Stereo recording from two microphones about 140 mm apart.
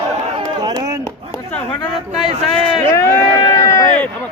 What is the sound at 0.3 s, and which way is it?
Run, 30° right (ahead or behind).